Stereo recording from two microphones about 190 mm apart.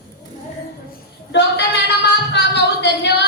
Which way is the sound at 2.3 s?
60° left (ahead or behind).